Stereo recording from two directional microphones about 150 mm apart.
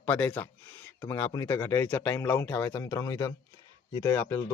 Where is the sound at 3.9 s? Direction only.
25° left (ahead or behind).